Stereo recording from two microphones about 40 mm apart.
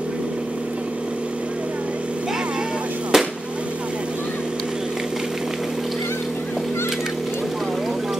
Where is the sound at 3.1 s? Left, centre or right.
Centre.